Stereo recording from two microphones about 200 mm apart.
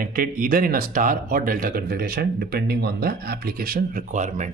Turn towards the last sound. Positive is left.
turn(degrees=-40)  # may be behind; listen again after turning